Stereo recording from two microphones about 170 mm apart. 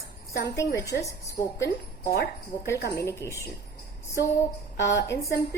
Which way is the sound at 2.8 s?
65° left (ahead or behind).